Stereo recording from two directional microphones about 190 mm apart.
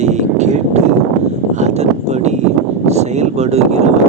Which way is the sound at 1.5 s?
35° right (ahead or behind).